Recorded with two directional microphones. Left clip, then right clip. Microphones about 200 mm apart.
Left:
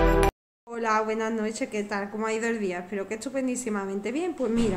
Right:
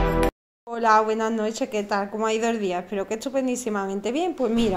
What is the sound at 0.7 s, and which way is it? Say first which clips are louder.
A woman's voice: right 7 dB; 20° right (ahead or behind).